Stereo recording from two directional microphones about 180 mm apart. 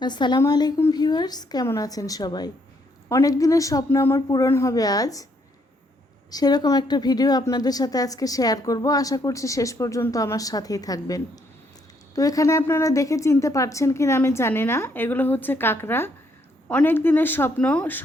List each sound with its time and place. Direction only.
0.0 s a woman's voice: 25° left (ahead or behind)
6.3 s a woman's voice: 20° left (ahead or behind)